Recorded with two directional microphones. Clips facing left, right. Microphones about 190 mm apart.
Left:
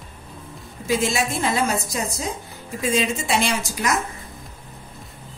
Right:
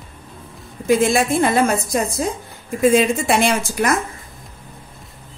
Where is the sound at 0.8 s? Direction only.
55° right (ahead or behind).